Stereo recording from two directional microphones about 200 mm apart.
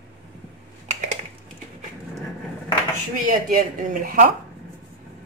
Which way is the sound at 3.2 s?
45° right (ahead or behind).